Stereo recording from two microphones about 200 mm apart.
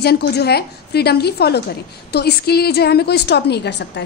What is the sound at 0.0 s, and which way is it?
A woman's voice, 55° left (ahead or behind).